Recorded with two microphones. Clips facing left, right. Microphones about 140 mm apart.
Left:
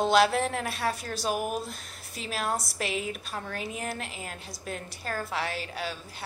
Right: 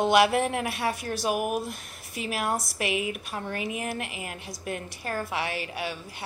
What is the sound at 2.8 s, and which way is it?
A woman's voice, 60° right (ahead or behind).